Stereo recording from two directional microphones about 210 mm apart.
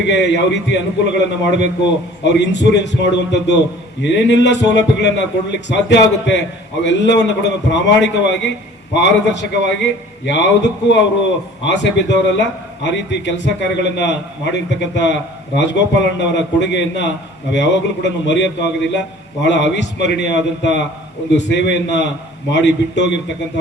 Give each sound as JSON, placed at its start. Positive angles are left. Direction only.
{"t": 0.1, "sound": "a man's voice", "side_deg": 55}